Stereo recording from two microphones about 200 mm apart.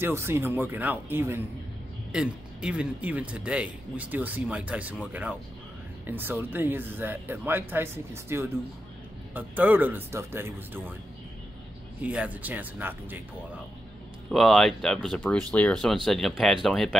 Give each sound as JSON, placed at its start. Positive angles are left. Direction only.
{"t": 0.0, "sound": "speech", "side_deg": -10}
{"t": 12.0, "sound": "speech", "side_deg": -5}
{"t": 14.3, "sound": "speech", "side_deg": 0}